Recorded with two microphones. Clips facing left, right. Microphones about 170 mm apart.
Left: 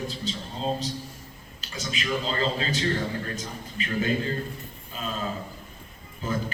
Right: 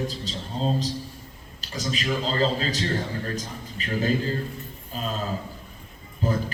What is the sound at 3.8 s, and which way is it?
Speech, 35° right (ahead or behind).